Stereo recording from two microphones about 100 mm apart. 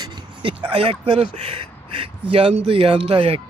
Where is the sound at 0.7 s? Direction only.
65° right (ahead or behind).